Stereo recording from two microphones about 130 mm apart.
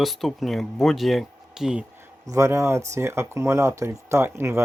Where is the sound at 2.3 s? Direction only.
25° right (ahead or behind).